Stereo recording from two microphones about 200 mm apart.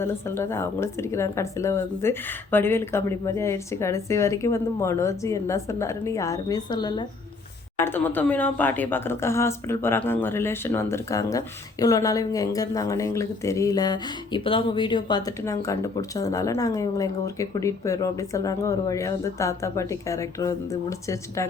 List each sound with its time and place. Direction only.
0.0 s a woman's voice: 15° left (ahead or behind)
7.8 s a woman's voice: 10° left (ahead or behind)